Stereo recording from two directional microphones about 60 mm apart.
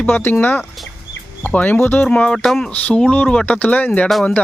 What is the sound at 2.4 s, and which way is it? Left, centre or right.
Speech, centre.